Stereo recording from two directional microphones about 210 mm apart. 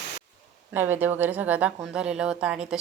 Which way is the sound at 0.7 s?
10° right (ahead or behind).